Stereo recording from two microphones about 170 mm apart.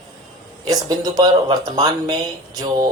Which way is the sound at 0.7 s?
20° right (ahead or behind).